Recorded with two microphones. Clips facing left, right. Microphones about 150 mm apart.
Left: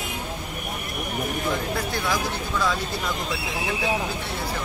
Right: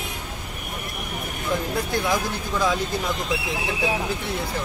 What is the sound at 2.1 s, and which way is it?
Speech, 15° right (ahead or behind).